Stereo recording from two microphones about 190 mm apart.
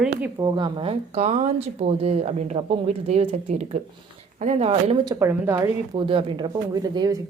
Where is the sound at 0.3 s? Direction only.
25° right (ahead or behind).